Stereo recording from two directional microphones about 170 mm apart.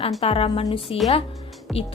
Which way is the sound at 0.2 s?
35° left (ahead or behind).